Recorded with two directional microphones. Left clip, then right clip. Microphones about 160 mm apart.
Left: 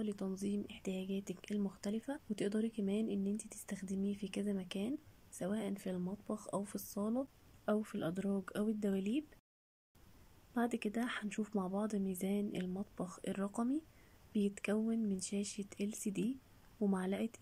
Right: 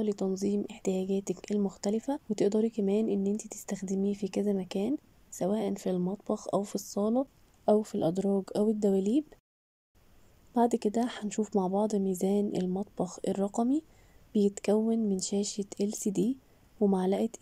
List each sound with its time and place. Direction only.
0.0 s speech: 25° right (ahead or behind)
10.5 s speech: 30° right (ahead or behind)